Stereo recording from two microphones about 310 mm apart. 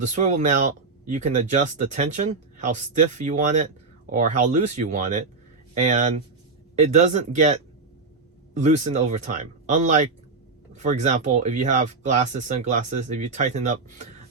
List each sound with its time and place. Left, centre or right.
0.0 s speech: right